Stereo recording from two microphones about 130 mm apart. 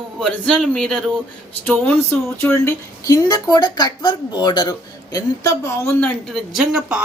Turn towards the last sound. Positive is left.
turn(degrees=-5)  # may be behind; listen again after turning